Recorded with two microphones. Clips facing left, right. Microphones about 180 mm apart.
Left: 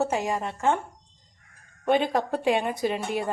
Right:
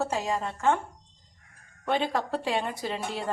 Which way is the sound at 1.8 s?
15° left (ahead or behind).